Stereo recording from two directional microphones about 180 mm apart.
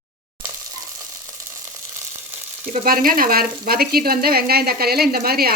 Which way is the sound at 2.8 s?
50° right (ahead or behind).